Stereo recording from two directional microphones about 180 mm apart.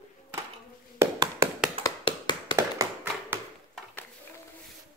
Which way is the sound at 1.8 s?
25° left (ahead or behind).